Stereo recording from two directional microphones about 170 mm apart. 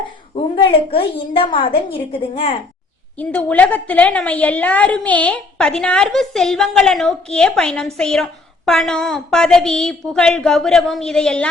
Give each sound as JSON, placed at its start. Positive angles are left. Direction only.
{"t": 0.5, "sound": "a woman's voice", "side_deg": 30}
{"t": 3.2, "sound": "a woman's voice", "side_deg": 10}